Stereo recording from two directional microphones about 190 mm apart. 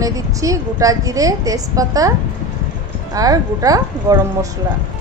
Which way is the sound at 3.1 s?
20° right (ahead or behind).